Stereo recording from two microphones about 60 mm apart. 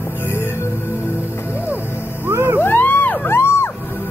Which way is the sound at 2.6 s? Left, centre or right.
Left.